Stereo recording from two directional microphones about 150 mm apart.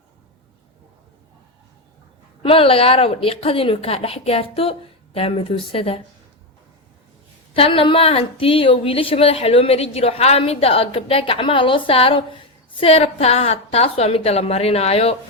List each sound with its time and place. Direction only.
2.4 s a woman's voice: 40° left (ahead or behind)
7.5 s a woman's voice: 40° left (ahead or behind)